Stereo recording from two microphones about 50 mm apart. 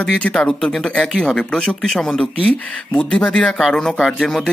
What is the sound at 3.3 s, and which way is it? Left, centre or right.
Speech, centre.